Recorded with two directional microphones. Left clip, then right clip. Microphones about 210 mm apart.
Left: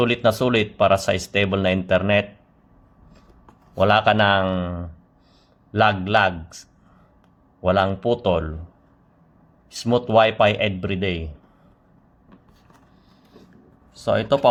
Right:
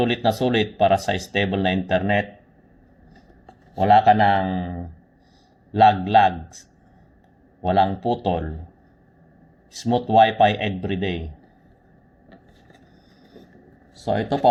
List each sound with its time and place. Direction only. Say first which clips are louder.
0.1 s speech: left 2 dB; 35° left (ahead or behind)
3.8 s speech: right 2 dB; 35° left (ahead or behind)
5.7 s speech: right 3 dB; 35° left (ahead or behind)
7.6 s speech: even; 35° left (ahead or behind)
9.7 s speech: even; 35° left (ahead or behind)
14.1 s speech: left 1 dB; 25° left (ahead or behind)